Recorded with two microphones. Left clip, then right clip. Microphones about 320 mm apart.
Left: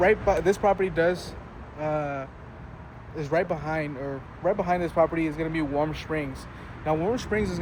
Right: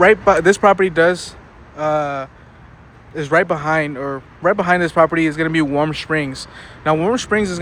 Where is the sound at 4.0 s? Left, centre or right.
Right.